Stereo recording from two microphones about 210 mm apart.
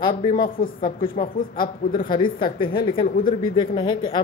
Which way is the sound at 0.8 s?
25° left (ahead or behind).